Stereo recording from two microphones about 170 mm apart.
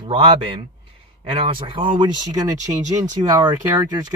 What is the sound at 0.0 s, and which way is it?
Speech, 30° right (ahead or behind).